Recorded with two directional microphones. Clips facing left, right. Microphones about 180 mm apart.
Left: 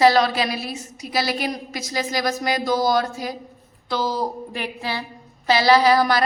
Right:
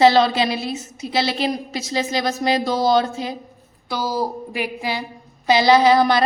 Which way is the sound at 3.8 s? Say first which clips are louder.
Right 1 dB; 10° right (ahead or behind).